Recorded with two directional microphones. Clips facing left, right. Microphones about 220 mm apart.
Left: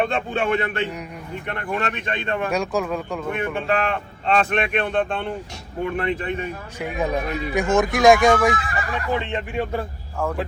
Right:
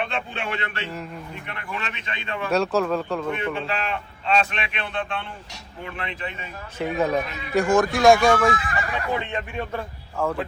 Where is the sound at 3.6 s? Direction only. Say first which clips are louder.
Left 6 dB; 50° left (ahead or behind).